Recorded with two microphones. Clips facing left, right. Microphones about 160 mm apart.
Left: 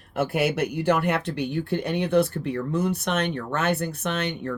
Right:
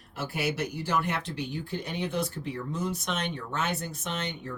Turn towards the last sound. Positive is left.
turn(degrees=65)  # may be behind; listen again after turning